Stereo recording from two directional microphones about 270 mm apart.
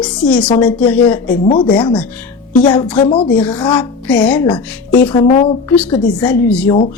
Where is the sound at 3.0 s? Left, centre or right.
Centre.